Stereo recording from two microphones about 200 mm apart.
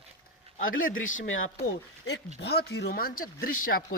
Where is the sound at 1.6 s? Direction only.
60° left (ahead or behind).